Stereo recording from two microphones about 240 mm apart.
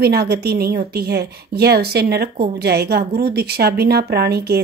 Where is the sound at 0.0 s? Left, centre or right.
Right.